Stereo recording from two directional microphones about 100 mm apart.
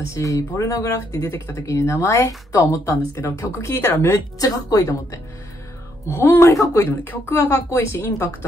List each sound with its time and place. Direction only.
0.1 s speech: 35° left (ahead or behind)